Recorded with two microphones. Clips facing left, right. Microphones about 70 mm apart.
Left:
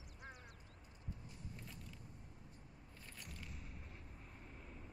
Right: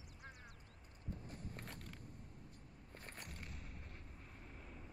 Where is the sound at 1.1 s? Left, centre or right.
Right.